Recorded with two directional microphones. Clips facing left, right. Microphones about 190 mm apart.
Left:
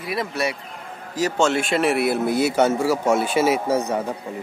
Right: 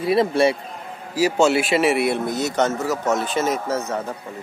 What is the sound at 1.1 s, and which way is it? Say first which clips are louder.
A man's voice: right 3 dB; 10° right (ahead or behind).